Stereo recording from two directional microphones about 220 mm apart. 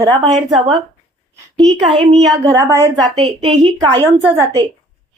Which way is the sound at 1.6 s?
25° right (ahead or behind).